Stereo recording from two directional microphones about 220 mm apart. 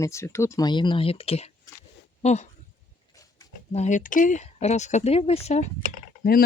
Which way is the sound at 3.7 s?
30° left (ahead or behind).